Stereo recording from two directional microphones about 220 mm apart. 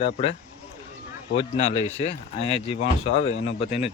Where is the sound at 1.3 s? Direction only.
30° left (ahead or behind).